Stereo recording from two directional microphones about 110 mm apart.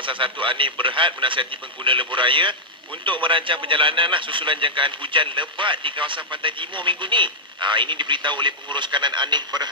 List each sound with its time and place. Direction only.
0.0 s a man's voice: 50° right (ahead or behind)